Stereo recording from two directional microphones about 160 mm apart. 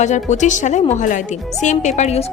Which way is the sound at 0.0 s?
45° left (ahead or behind).